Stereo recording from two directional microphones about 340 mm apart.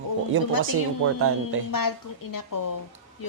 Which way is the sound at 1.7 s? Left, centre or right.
Left.